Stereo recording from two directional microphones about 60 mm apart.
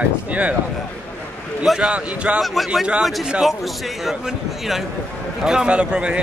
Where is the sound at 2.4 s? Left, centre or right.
Centre.